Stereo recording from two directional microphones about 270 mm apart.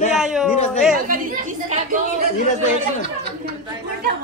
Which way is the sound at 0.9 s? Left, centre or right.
Right.